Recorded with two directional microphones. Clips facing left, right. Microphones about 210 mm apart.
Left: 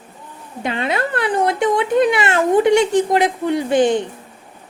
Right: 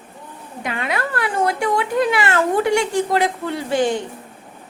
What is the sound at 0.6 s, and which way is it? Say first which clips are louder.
Speech: left 4 dB; 25° left (ahead or behind).